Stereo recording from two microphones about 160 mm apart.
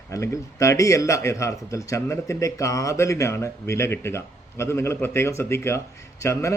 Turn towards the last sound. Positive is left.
turn(degrees=20)  # may be behind; listen again after turning